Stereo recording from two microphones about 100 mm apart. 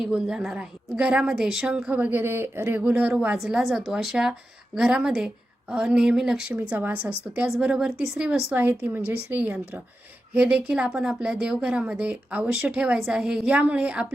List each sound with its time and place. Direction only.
0.0 s a woman's voice: 5° right (ahead or behind)
6.5 s a woman's voice: 20° right (ahead or behind)